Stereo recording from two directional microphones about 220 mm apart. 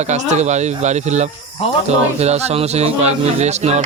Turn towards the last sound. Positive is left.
turn(degrees=-30)  # may be behind; listen again after turning